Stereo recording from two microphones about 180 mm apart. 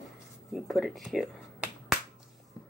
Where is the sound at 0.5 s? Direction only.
Centre (ahead or behind).